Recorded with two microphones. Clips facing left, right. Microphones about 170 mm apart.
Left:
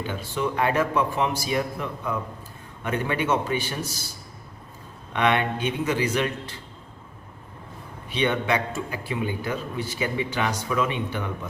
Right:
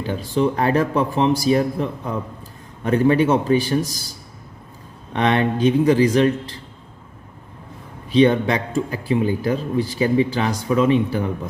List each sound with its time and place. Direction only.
0.0 s a man's voice: 35° right (ahead or behind)
5.1 s a man's voice: 35° right (ahead or behind)
8.1 s a man's voice: 35° right (ahead or behind)